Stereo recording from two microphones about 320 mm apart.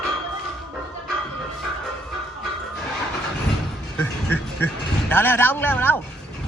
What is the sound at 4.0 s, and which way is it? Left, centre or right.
Music, centre.